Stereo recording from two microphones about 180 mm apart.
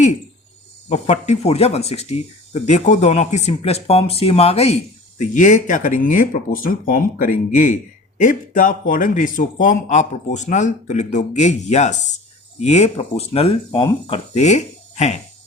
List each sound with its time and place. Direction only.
0.9 s speech: 40° left (ahead or behind)